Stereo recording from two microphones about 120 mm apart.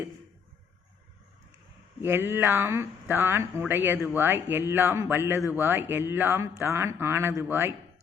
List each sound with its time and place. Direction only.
2.0 s speech: 20° right (ahead or behind)